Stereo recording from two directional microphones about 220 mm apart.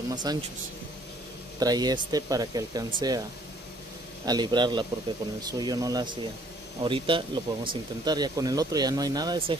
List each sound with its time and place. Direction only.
0.1 s a man's voice: 20° right (ahead or behind)
1.6 s speech: 15° right (ahead or behind)
4.3 s a man's voice: 20° right (ahead or behind)